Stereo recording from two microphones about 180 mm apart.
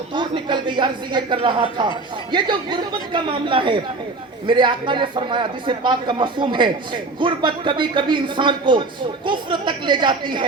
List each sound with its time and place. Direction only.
0.1 s a man's voice: 25° right (ahead or behind)